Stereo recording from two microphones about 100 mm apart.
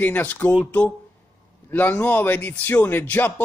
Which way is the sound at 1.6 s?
15° left (ahead or behind).